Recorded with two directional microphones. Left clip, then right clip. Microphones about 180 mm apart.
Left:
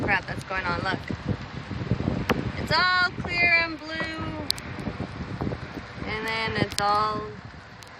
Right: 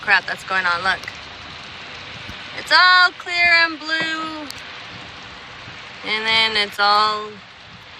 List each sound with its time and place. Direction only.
0.1 s speech: 25° right (ahead or behind)
2.6 s speech: 30° right (ahead or behind)
6.1 s speech: 25° right (ahead or behind)